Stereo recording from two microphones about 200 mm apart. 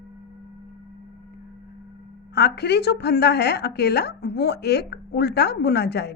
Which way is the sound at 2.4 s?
55° left (ahead or behind).